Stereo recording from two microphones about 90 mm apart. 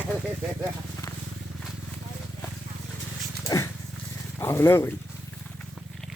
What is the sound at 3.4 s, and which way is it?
Dog, 35° left (ahead or behind).